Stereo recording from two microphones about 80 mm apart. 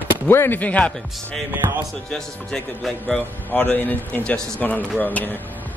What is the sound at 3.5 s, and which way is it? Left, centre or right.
A man's voice, left.